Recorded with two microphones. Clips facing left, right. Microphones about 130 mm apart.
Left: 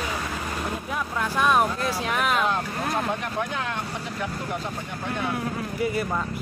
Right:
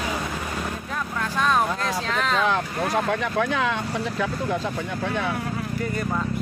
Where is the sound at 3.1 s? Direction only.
90° right.